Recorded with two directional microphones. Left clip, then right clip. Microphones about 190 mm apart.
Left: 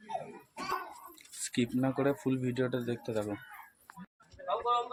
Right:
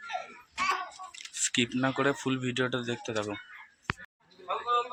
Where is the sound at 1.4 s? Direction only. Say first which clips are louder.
Right 4 dB; 5° left (ahead or behind).